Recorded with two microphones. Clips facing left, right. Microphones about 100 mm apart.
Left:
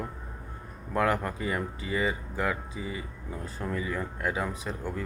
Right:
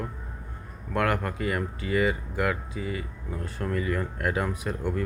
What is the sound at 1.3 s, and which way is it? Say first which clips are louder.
Speech: right 2 dB; 15° left (ahead or behind).